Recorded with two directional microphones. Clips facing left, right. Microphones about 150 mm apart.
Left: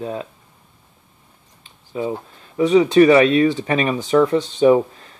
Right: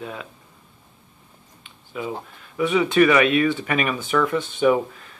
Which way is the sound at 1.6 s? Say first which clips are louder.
Left 6 dB; 30° left (ahead or behind).